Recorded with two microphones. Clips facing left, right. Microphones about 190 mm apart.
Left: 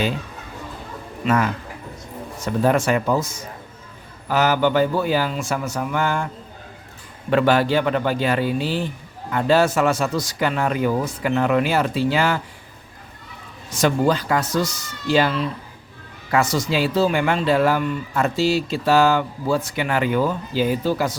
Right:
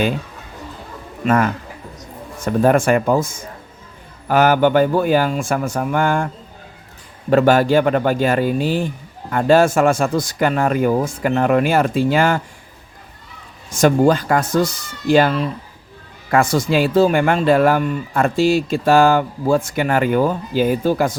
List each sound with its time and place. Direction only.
1.2 s a man's voice: 50° right (ahead or behind)
7.3 s speech: 45° right (ahead or behind)
13.7 s speech: 50° right (ahead or behind)